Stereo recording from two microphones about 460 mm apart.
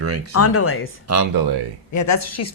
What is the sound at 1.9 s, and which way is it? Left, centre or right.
Speech, left.